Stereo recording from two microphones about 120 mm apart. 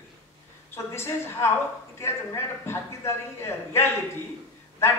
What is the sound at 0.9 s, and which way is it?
A man's voice, 20° left (ahead or behind).